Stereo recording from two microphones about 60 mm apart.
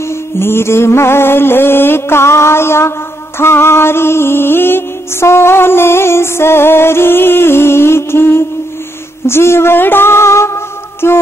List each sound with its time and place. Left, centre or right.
0.4 s music: left